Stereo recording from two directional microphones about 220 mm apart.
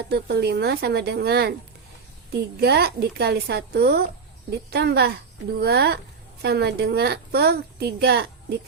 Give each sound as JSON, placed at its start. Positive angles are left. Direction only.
{"t": 0.1, "sound": "a woman's voice", "side_deg": -45}
{"t": 2.6, "sound": "a woman's voice", "side_deg": -45}